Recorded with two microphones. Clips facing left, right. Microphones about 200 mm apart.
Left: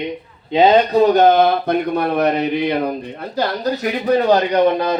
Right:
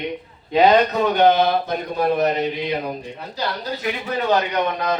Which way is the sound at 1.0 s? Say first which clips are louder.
Left 4 dB; 45° left (ahead or behind).